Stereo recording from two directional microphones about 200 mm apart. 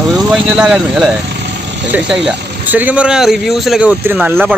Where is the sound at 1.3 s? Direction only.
60° right (ahead or behind).